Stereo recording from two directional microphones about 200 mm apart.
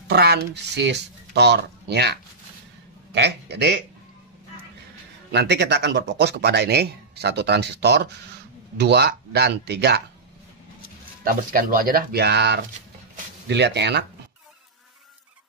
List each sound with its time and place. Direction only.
0.1 s a man's voice: 55° right (ahead or behind)
5.3 s a man's voice: 55° right (ahead or behind)
11.2 s a man's voice: 45° right (ahead or behind)